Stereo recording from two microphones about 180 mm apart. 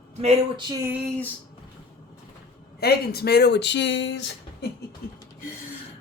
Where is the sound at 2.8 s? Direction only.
60° left (ahead or behind); by 4.7 s 80° left.